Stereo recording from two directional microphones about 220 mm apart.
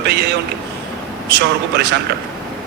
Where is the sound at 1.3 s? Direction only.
50° right (ahead or behind).